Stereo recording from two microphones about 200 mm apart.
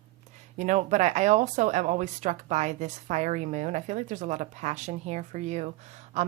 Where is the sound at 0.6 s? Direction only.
35° right (ahead or behind).